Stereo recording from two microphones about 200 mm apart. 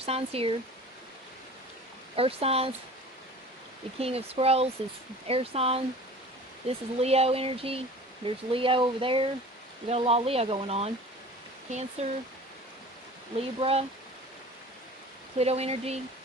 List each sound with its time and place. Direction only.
0.0 s speech: 30° right (ahead or behind)
2.1 s speech: 30° right (ahead or behind)
3.9 s speech: 30° right (ahead or behind)
13.3 s speech: 30° right (ahead or behind)
15.4 s speech: 30° right (ahead or behind)